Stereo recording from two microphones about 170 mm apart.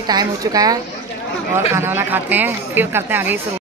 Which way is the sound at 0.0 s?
25° right (ahead or behind).